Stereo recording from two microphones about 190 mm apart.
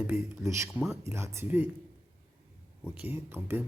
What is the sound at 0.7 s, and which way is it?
Speech, centre (ahead or behind).